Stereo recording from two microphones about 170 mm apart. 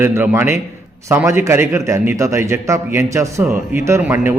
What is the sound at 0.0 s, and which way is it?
Speech, 10° right (ahead or behind).